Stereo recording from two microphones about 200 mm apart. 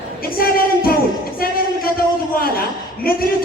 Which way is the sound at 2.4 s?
50° left (ahead or behind).